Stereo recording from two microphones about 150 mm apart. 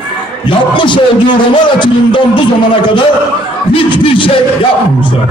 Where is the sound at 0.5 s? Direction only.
35° left (ahead or behind).